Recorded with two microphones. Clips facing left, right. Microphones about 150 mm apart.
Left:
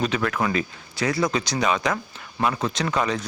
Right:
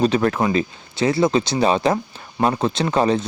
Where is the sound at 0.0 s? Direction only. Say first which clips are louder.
Right 6 dB; 35° right (ahead or behind).